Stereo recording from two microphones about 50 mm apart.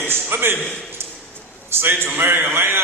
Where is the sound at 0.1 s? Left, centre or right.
Right.